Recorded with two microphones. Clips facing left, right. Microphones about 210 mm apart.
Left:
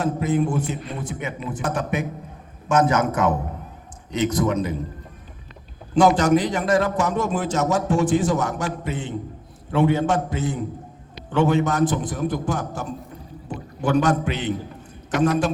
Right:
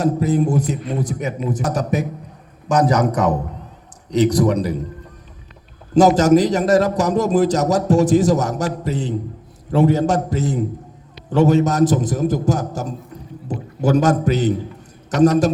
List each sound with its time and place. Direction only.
0.0 s a man's voice: 40° right (ahead or behind)
5.9 s a man's voice: 40° right (ahead or behind)